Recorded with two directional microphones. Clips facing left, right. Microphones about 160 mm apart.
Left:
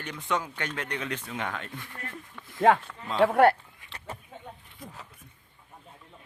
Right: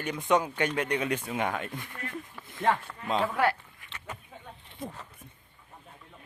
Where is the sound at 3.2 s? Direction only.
65° left (ahead or behind).